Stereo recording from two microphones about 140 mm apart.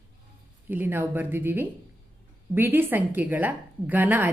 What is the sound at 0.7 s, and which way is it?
A woman's voice, 15° right (ahead or behind).